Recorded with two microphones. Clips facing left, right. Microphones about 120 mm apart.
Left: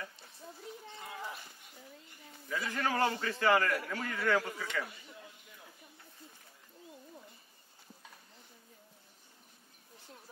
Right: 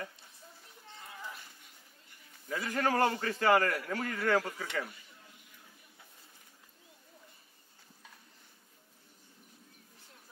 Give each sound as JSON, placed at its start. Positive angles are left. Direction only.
{"t": 2.5, "sound": "a man's voice", "side_deg": -40}